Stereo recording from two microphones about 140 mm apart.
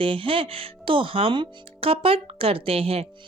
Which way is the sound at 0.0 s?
40° right (ahead or behind).